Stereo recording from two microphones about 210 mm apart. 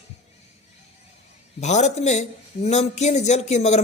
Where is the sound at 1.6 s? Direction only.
35° left (ahead or behind).